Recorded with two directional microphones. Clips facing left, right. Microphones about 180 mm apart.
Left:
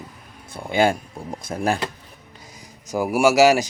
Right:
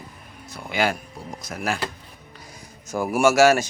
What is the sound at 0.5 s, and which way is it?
Speech, 30° left (ahead or behind).